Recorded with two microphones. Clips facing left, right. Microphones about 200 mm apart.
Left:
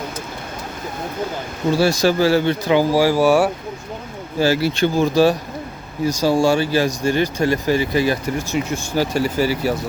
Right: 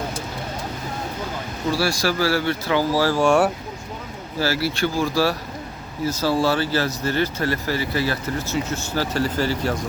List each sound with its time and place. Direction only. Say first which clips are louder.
1.7 s speech: left 6 dB; 20° left (ahead or behind); by 3.5 s 5° left (ahead or behind)
4.4 s speech: left 5 dB; 15° left (ahead or behind)